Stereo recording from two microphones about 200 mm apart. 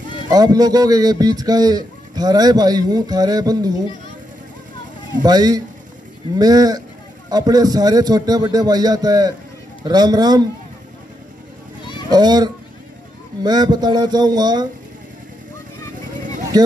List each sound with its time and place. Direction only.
0.3 s speech: 20° right (ahead or behind)
5.2 s speech: 20° right (ahead or behind)
12.1 s speech: 20° right (ahead or behind)
16.5 s speech: 20° right (ahead or behind)